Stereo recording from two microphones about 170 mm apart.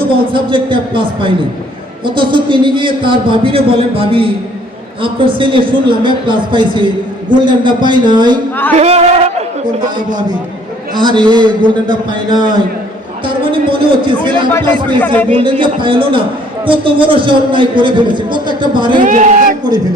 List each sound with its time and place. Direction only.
0.3 s a man's voice: 30° right (ahead or behind)
8.7 s speech: 40° right (ahead or behind)
10.1 s a man's voice: 25° right (ahead or behind)
15.0 s speech: 10° left (ahead or behind)
15.3 s a man's voice: 30° right (ahead or behind)
19.0 s speech: 50° right (ahead or behind)